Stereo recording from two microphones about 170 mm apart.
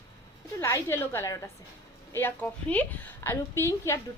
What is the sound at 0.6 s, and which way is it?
A woman's voice, 15° left (ahead or behind).